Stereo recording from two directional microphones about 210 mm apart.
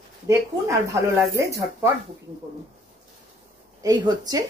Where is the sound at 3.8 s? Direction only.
15° right (ahead or behind).